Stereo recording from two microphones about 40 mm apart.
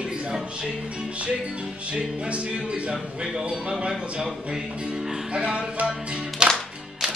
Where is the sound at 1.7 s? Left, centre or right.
Right.